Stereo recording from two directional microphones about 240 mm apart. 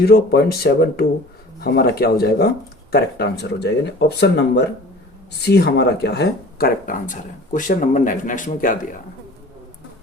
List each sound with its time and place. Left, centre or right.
0.0 s speech: left